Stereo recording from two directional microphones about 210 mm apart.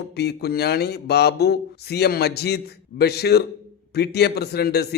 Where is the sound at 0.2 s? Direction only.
50° left (ahead or behind).